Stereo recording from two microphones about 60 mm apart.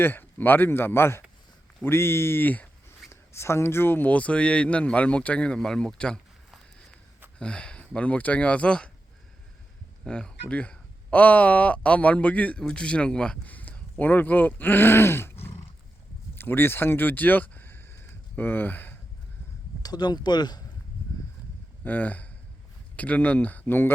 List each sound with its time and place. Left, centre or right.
0.0 s speech: left; by 6.1 s centre
7.3 s speech: centre
10.0 s speech: centre; by 15.5 s left
16.3 s a sound: left
21.8 s speech: left